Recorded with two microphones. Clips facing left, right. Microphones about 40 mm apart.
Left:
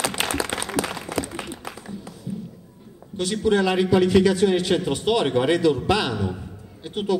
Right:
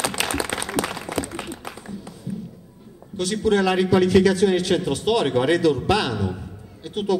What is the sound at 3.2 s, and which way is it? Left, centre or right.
A man's voice, centre.